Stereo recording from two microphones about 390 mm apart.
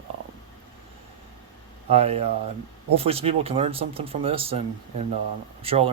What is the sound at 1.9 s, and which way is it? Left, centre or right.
Speech, centre.